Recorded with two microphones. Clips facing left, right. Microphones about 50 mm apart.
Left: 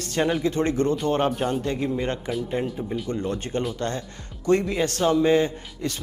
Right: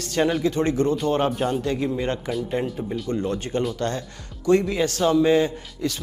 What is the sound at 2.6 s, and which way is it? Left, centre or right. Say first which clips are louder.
Speech: right 1 dB; right.